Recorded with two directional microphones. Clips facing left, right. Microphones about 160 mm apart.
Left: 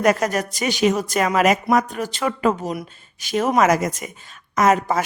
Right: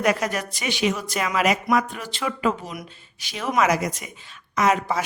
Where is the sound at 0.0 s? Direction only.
45° left (ahead or behind).